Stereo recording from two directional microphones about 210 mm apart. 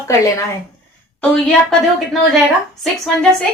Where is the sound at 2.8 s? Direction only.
5° left (ahead or behind).